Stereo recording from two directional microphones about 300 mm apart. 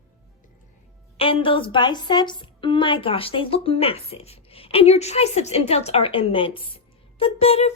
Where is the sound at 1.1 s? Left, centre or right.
Centre.